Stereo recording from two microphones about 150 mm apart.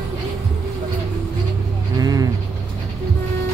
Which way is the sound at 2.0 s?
25° right (ahead or behind).